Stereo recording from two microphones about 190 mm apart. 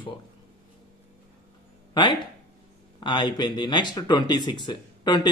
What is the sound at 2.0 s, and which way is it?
Speech, 25° left (ahead or behind).